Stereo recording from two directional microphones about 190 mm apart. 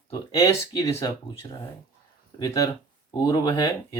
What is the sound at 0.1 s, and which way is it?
Speech, 20° left (ahead or behind).